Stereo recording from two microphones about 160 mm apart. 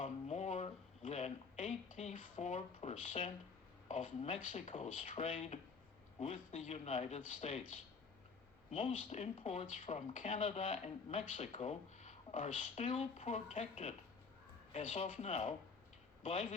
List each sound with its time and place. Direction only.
0.0 s a sound: 45° left (ahead or behind)
3.8 s speech: 50° left (ahead or behind)
4.4 s speech: 55° left (ahead or behind)
8.7 s speech: 35° left (ahead or behind); by 10.2 s 50° left (ahead or behind)
10.2 s a man's voice: 40° left (ahead or behind)